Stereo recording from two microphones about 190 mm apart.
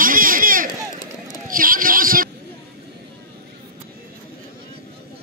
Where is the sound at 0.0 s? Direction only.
45° right (ahead or behind).